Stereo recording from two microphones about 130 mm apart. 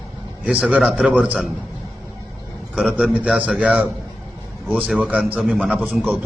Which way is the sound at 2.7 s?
5° right (ahead or behind).